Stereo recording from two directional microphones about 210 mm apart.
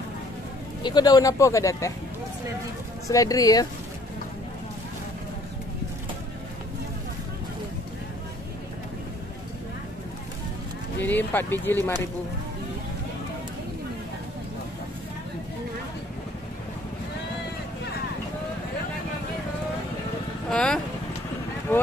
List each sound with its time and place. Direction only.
0.8 s speech: 20° left (ahead or behind)
3.1 s speech: 15° left (ahead or behind)
11.0 s speech: 10° left (ahead or behind)
20.4 s speech: 5° left (ahead or behind)